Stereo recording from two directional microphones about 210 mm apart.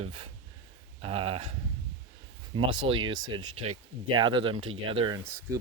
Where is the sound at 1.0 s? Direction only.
25° right (ahead or behind).